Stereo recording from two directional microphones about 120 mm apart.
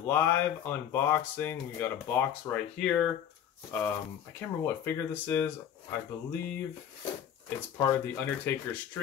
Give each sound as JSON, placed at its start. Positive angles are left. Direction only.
{"t": 0.0, "sound": "speech", "side_deg": 20}
{"t": 2.5, "sound": "speech", "side_deg": 5}
{"t": 7.4, "sound": "speech", "side_deg": 15}